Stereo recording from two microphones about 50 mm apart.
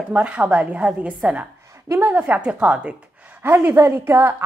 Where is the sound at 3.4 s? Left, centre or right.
Right.